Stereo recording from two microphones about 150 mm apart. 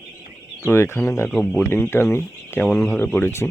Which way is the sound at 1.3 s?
5° left (ahead or behind).